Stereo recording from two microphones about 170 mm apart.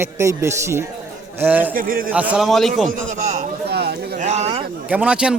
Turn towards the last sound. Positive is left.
turn(degrees=-5)  # may be behind; listen again after turning